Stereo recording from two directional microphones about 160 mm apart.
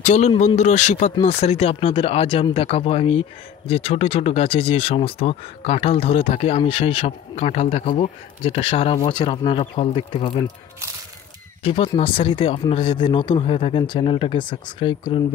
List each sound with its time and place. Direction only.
0.0 s speech: 45° left (ahead or behind)
11.6 s speech: 35° left (ahead or behind)